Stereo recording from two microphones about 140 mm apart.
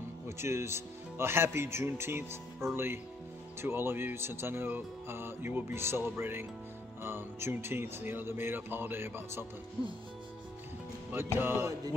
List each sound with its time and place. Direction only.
0.4 s speech: 20° right (ahead or behind)
11.1 s speech: 15° right (ahead or behind)